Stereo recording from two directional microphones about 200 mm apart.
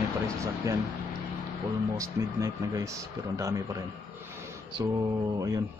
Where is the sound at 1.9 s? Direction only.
15° right (ahead or behind).